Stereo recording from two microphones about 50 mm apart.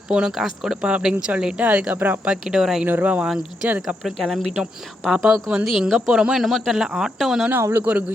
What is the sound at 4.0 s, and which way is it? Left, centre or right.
Speech, centre.